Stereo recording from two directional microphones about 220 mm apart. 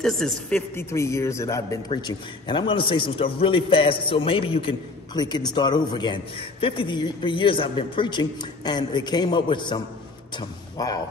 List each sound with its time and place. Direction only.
0.0 s a man's voice: centre (ahead or behind)